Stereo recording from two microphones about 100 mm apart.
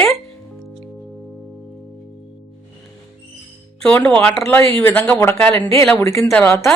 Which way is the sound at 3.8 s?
10° left (ahead or behind).